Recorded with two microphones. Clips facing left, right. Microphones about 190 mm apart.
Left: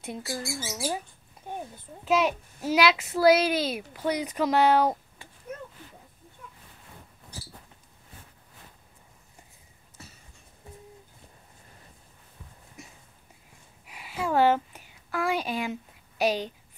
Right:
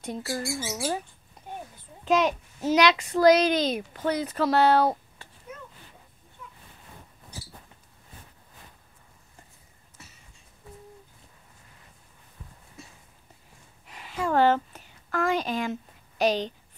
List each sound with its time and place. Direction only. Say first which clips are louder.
0.0 s a child's voice: right 3 dB; 5° left (ahead or behind)
2.0 s a child's voice: right 1 dB; 5° left (ahead or behind)
12.8 s a sound: even; 20° left (ahead or behind)